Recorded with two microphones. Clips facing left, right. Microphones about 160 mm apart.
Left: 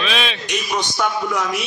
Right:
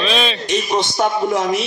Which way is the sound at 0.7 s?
35° right (ahead or behind).